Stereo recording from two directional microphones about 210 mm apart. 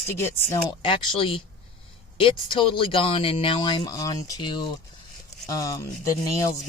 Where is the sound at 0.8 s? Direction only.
25° left (ahead or behind).